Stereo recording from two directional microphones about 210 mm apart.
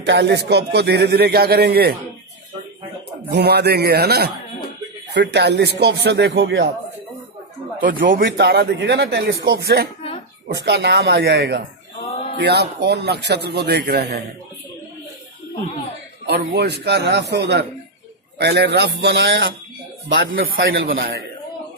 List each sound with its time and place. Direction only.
0.0 s a man's voice: 55° right (ahead or behind)
3.3 s a man's voice: 50° right (ahead or behind)
8.0 s speech: 40° right (ahead or behind)
8.3 s a man's voice: 50° right (ahead or behind)
12.0 s a sound: 30° left (ahead or behind)
12.4 s a man's voice: 55° right (ahead or behind)
16.3 s a man's voice: 55° right (ahead or behind)